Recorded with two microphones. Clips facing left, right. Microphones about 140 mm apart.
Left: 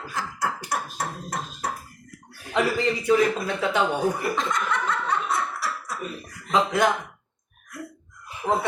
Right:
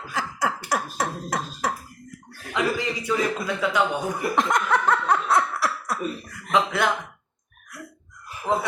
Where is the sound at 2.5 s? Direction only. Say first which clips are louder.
Left 2 dB; 30° left (ahead or behind).